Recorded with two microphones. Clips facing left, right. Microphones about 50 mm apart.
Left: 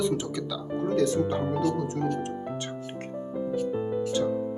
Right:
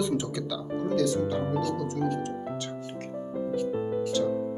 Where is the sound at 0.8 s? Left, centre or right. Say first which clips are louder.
Left 2 dB; left.